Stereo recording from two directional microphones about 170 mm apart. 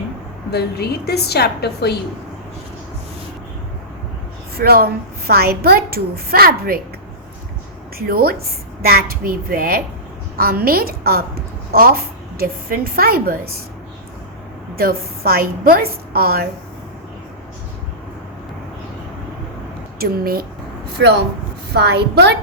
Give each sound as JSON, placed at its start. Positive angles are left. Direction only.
{"t": 0.5, "sound": "a woman's voice", "side_deg": 70}
{"t": 4.5, "sound": "a woman's voice", "side_deg": -65}
{"t": 7.9, "sound": "a woman's voice", "side_deg": -60}
{"t": 14.8, "sound": "a woman's voice", "side_deg": -60}
{"t": 20.0, "sound": "a woman's voice", "side_deg": -60}
{"t": 21.0, "sound": "speech", "side_deg": -90}
{"t": 21.7, "sound": "a woman's voice", "side_deg": -70}